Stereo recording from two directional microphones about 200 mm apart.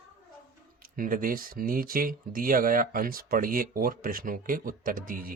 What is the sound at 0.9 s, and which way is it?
Speech, 45° right (ahead or behind).